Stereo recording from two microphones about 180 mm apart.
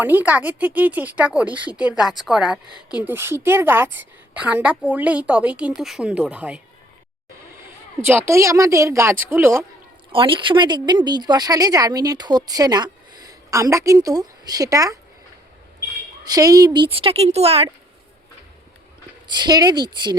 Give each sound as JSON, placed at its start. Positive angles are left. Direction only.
{"t": 0.0, "sound": "a woman's voice", "side_deg": -10}
{"t": 8.0, "sound": "a woman's voice", "side_deg": -10}
{"t": 10.1, "sound": "speech", "side_deg": -30}
{"t": 16.2, "sound": "speech", "side_deg": -20}
{"t": 19.3, "sound": "speech", "side_deg": -25}